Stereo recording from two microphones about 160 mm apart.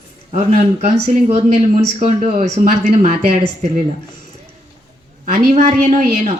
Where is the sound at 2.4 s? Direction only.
45° right (ahead or behind).